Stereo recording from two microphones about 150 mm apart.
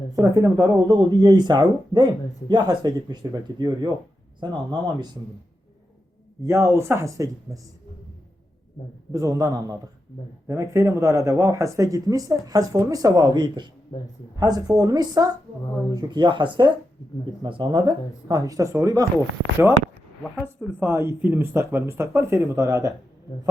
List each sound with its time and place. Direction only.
0.2 s speech: 20° right (ahead or behind)
6.4 s speech: 20° right (ahead or behind)
9.1 s speech: 20° right (ahead or behind)
13.9 s speech: 30° left (ahead or behind)
14.3 s speech: 25° right (ahead or behind)
20.7 s speech: 15° right (ahead or behind)